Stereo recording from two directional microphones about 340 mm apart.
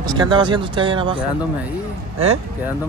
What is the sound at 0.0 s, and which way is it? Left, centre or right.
Speech, centre.